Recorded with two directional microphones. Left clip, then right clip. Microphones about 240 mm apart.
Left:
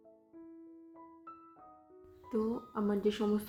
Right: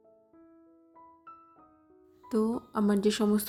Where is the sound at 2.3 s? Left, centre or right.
Right.